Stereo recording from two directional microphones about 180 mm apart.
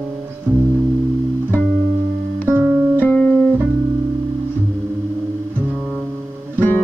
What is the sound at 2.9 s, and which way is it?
Music, 10° left (ahead or behind).